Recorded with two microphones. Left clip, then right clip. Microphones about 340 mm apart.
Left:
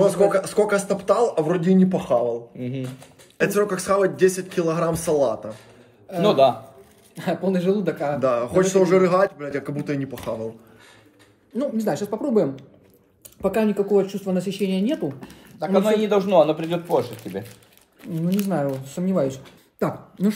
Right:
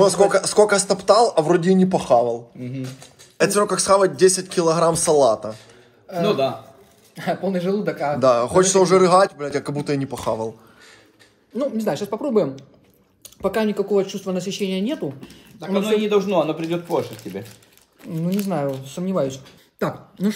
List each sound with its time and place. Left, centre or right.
0.0 s a man's voice: centre
3.3 s a man's voice: centre
7.2 s a man's voice: centre
11.5 s a man's voice: centre
15.1 s a man's voice: centre
18.7 s speech: centre